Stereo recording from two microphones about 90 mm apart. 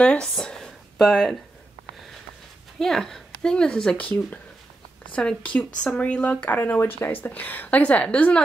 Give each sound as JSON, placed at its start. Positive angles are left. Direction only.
{"t": 0.0, "sound": "speech", "side_deg": 10}
{"t": 0.3, "sound": "a sound", "side_deg": 5}
{"t": 2.8, "sound": "speech", "side_deg": 5}